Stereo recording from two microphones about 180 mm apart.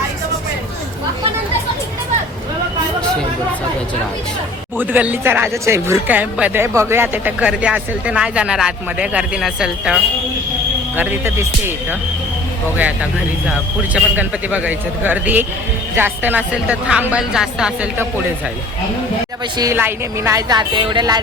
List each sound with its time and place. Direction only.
4.8 s speech: 10° right (ahead or behind)
19.5 s speech: 15° right (ahead or behind)